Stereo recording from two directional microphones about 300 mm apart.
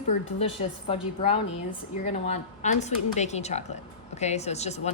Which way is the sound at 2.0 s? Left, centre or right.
Left.